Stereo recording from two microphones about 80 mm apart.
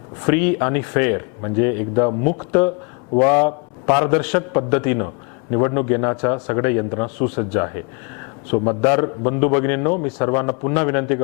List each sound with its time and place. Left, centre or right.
0.2 s speech: centre